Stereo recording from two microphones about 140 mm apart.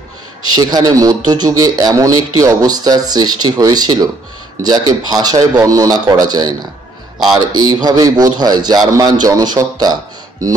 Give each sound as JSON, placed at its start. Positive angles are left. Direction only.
{"t": 0.6, "sound": "speech", "side_deg": -30}
{"t": 7.6, "sound": "speech", "side_deg": -25}